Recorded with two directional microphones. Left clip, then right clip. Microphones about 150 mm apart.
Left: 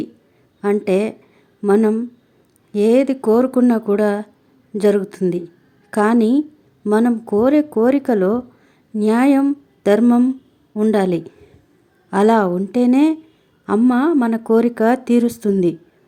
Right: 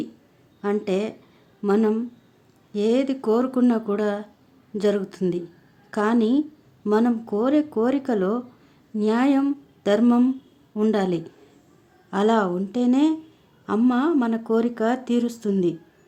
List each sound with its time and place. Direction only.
0.6 s speech: 30° left (ahead or behind)
2.7 s speech: 30° left (ahead or behind)
6.9 s speech: 20° left (ahead or behind)
7.3 s speech: 30° left (ahead or behind)
10.0 s speech: 15° left (ahead or behind)
10.9 s speech: 25° left (ahead or behind)